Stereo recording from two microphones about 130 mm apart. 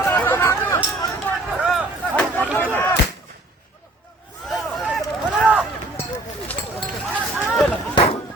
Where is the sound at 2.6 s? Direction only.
15° left (ahead or behind).